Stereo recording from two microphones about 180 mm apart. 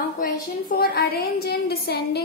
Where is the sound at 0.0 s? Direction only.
55° left (ahead or behind).